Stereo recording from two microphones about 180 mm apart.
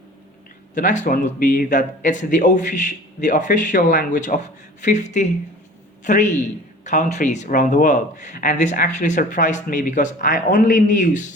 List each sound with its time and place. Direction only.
0.7 s a man's voice: 45° left (ahead or behind)